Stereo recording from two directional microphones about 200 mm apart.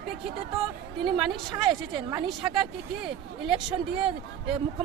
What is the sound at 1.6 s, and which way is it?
A woman's voice, 20° right (ahead or behind).